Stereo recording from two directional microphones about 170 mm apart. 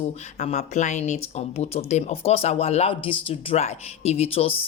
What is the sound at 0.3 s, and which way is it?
Speech, 40° left (ahead or behind).